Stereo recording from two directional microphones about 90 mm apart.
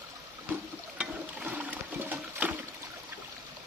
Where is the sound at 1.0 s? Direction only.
15° right (ahead or behind).